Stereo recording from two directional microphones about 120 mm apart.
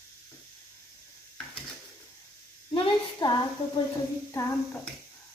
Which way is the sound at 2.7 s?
40° left (ahead or behind).